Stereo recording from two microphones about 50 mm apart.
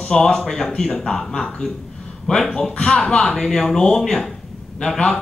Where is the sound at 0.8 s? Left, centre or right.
Centre.